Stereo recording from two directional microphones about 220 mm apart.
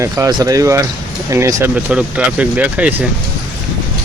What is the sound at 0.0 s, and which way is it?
Speech, 15° right (ahead or behind).